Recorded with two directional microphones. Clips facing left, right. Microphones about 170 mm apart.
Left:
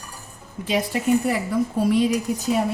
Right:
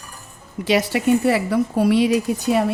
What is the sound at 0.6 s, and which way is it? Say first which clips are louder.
Speech: right 4 dB; 85° right.